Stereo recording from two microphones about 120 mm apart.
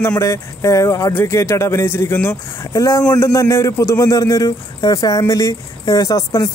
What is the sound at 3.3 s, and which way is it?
Speech, 25° left (ahead or behind).